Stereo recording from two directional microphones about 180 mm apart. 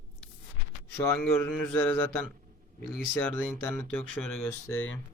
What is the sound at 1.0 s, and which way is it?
Speech, 10° left (ahead or behind).